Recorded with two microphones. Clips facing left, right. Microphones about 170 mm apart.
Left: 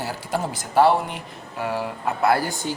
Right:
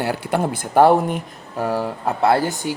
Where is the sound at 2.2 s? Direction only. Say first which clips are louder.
Right 3 dB; 25° right (ahead or behind).